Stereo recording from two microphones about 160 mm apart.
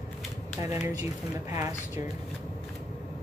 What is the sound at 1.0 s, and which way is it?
Speech, 20° right (ahead or behind).